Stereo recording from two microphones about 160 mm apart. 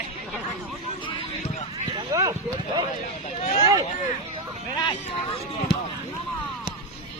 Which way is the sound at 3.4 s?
45° left (ahead or behind).